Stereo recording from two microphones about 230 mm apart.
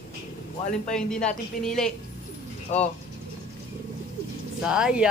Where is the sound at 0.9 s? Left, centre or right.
Centre.